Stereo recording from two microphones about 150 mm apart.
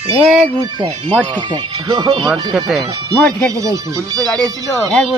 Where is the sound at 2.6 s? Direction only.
Centre (ahead or behind).